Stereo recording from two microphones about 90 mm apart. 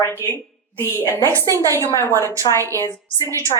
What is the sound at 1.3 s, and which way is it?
Speech, 35° right (ahead or behind).